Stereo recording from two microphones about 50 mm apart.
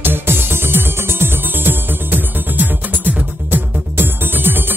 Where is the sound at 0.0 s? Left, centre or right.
Right.